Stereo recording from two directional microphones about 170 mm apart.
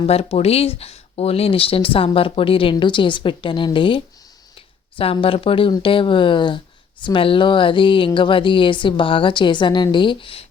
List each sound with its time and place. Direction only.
0.0 s speech: 35° left (ahead or behind)